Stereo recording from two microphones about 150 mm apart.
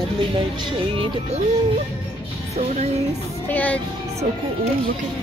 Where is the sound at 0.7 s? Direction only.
40° right (ahead or behind).